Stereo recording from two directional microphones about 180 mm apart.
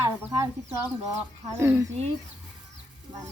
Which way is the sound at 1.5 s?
15° right (ahead or behind).